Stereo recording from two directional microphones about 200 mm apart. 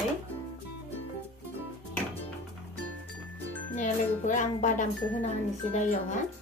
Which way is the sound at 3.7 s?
40° left (ahead or behind).